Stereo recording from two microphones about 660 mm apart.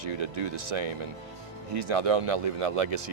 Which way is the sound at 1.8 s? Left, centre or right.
Right.